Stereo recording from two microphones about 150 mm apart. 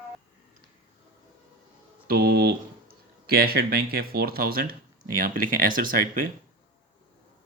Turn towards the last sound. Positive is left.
turn(degrees=-70)  # may be behind; listen again after turning